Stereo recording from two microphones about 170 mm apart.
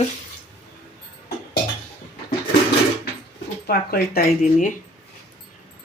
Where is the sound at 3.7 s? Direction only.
65° left (ahead or behind).